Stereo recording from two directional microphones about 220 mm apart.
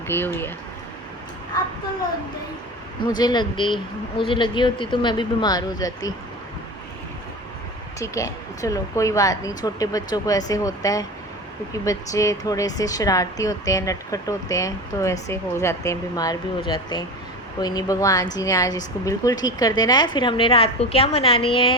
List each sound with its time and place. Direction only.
0.1 s speech: 10° left (ahead or behind)
3.0 s a woman's voice: 20° left (ahead or behind)
7.9 s a woman's voice: 15° left (ahead or behind)